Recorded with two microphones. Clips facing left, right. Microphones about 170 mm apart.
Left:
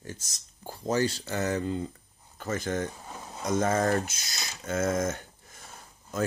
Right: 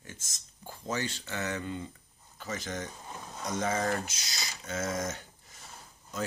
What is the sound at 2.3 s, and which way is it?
Speech, 50° left (ahead or behind).